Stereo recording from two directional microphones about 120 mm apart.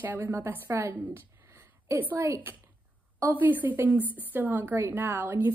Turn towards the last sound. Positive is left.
turn(degrees=-20)  # may be behind; listen again after turning